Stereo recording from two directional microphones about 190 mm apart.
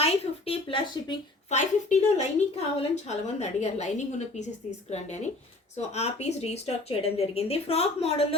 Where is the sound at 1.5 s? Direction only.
35° left (ahead or behind).